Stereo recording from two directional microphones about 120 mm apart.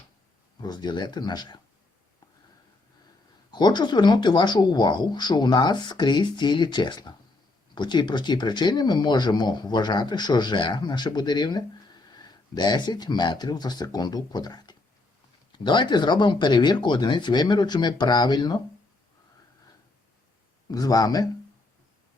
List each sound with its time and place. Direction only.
0.6 s speech: 35° left (ahead or behind)
3.5 s speech: 40° left (ahead or behind)
20.7 s speech: 30° left (ahead or behind)